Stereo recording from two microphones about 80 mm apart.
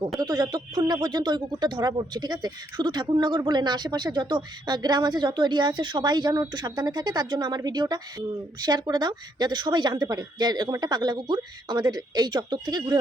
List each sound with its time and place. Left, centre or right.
0.2 s speech: right